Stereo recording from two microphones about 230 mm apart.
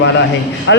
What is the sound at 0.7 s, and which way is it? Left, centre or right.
Speech, left.